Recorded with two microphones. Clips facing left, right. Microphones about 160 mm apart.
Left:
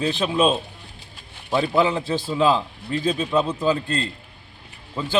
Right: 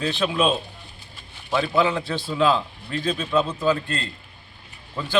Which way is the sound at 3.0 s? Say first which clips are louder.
Left 1 dB; 10° left (ahead or behind).